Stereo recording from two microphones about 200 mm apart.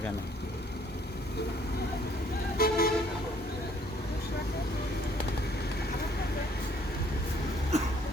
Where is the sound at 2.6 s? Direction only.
50° left (ahead or behind).